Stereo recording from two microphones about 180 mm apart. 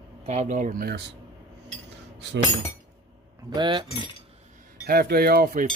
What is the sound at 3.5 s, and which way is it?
Cutlery, 25° right (ahead or behind).